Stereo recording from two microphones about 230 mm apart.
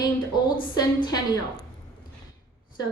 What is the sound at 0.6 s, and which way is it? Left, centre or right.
Speech, centre.